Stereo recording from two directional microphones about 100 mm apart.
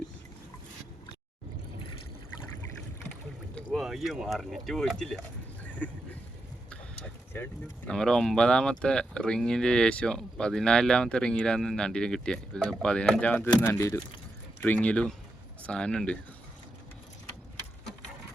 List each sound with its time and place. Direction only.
3.8 s speech: 5° right (ahead or behind); by 6.0 s 15° left (ahead or behind)
6.7 s a sound: 10° left (ahead or behind)
7.9 s speech: 5° left (ahead or behind)
13.6 s speech: 25° left (ahead or behind)
14.6 s speech: 15° left (ahead or behind)